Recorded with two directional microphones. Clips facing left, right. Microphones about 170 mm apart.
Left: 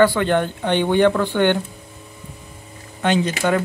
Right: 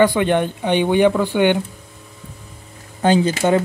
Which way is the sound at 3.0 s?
30° right (ahead or behind).